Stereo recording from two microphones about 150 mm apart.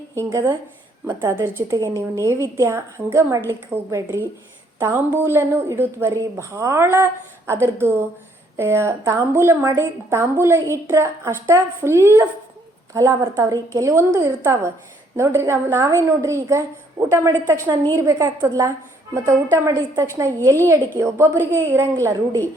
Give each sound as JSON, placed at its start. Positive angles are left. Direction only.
{"t": 0.1, "sound": "a woman's voice", "side_deg": -20}